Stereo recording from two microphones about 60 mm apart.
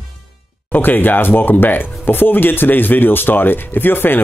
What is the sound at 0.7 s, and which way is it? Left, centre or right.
Speech, left.